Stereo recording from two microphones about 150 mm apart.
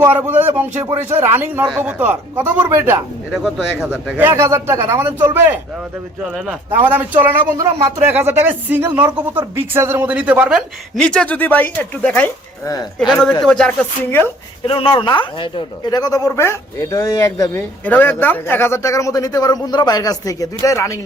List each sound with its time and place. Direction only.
0.0 s speech: 10° right (ahead or behind)
3.3 s speech: 5° right (ahead or behind)
6.3 s speech: 10° right (ahead or behind)
7.5 s speech: 25° right (ahead or behind)
8.1 s speech: 15° right (ahead or behind)
10.9 s speech: 5° left (ahead or behind)
14.7 s a man's voice: 35° left (ahead or behind)
17.8 s a man's voice: 10° left (ahead or behind)